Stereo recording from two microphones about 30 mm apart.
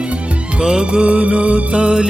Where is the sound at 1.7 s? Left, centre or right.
Right.